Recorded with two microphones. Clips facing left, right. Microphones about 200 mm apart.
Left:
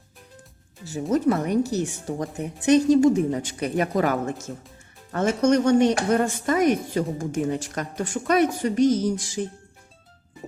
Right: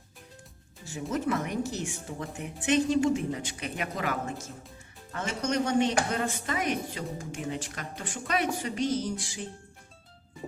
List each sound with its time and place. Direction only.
0.9 s a woman's voice: 40° left (ahead or behind)